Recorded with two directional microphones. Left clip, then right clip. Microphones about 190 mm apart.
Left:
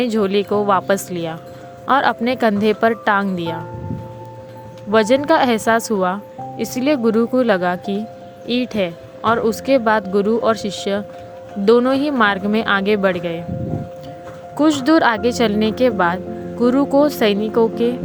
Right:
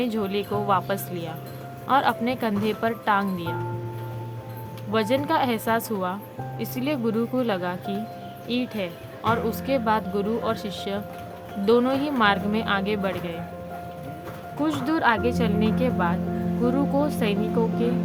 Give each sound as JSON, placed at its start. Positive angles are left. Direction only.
{"t": 0.0, "sound": "speech", "side_deg": 35}
{"t": 4.9, "sound": "speech", "side_deg": 35}
{"t": 14.6, "sound": "speech", "side_deg": 35}